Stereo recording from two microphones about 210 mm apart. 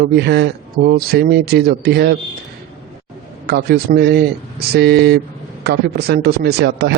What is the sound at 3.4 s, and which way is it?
A man's voice, 50° right (ahead or behind).